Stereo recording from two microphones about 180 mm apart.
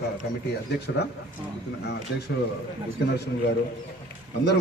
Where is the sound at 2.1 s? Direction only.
70° left (ahead or behind).